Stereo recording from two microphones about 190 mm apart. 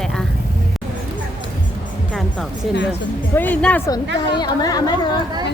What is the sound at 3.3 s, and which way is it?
Speech, 10° left (ahead or behind).